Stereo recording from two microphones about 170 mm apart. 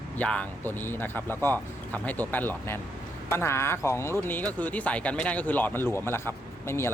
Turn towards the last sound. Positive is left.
turn(degrees=15)  # may be behind; listen again after turning